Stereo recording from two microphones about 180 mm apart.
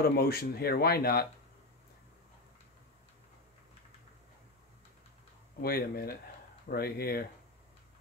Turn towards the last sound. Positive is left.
turn(degrees=55)  # may be behind; listen again after turning